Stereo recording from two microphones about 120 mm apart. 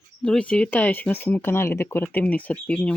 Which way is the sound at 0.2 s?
10° left (ahead or behind).